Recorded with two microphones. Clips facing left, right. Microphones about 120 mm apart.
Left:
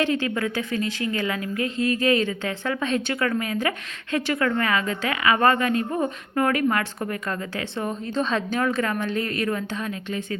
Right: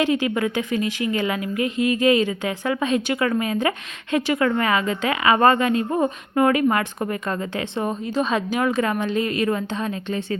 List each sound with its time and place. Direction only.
0.0 s a woman's voice: 15° right (ahead or behind); by 10.3 s 30° right (ahead or behind)